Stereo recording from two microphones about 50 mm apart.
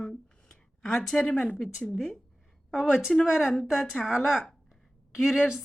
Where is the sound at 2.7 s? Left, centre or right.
Centre.